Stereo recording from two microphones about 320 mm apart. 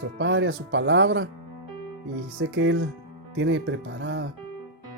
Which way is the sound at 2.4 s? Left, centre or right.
Right.